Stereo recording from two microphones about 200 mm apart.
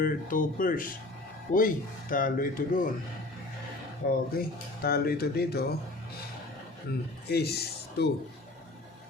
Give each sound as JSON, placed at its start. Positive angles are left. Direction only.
{"t": 0.0, "sound": "speech", "side_deg": 45}
{"t": 4.0, "sound": "speech", "side_deg": 40}
{"t": 7.3, "sound": "speech", "side_deg": 55}